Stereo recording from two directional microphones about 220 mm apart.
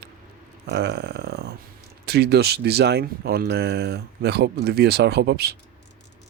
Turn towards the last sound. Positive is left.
turn(degrees=-45)  # may be behind; listen again after turning